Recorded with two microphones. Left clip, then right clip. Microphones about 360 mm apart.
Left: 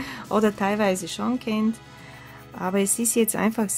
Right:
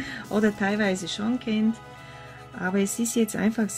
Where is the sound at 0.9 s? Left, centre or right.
Centre.